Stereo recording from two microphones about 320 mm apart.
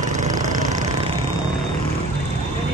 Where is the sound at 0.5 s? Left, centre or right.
Right.